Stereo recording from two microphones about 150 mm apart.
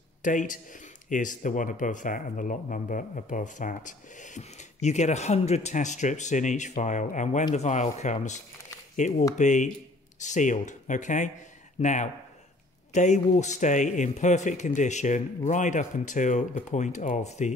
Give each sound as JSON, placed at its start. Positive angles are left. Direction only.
{"t": 0.2, "sound": "speech", "side_deg": 60}